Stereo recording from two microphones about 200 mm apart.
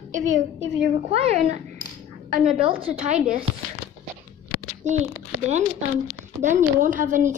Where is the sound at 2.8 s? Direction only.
35° right (ahead or behind).